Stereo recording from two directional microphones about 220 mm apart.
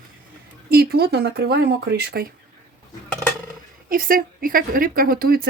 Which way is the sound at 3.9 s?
40° right (ahead or behind).